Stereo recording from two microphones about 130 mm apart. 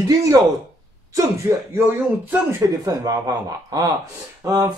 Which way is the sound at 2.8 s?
30° right (ahead or behind).